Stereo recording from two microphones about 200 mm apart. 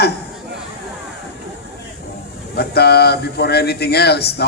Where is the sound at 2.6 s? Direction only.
55° left (ahead or behind).